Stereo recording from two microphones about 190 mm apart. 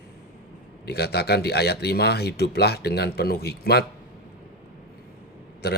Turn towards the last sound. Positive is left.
turn(degrees=60)  # may be behind; listen again after turning